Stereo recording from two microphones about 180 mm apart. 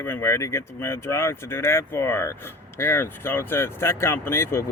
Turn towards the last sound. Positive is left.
turn(degrees=15)  # may be behind; listen again after turning